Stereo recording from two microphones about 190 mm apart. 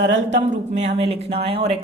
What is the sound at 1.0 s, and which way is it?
Speech, 30° right (ahead or behind).